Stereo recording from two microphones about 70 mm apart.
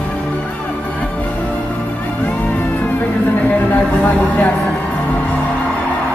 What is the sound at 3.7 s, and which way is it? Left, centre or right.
Music, left.